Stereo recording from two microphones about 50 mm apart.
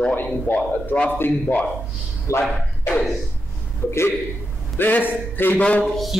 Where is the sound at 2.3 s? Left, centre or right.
Left.